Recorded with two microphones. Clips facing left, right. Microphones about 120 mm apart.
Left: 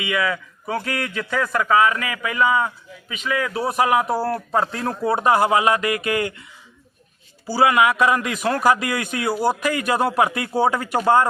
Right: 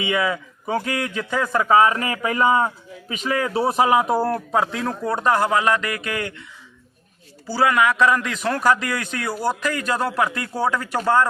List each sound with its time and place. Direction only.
0.0 s a man's voice: 25° right (ahead or behind)
4.3 s a man's voice: 5° left (ahead or behind)
7.4 s a man's voice: 10° left (ahead or behind)